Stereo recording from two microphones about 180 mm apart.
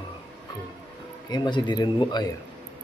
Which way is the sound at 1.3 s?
25° left (ahead or behind).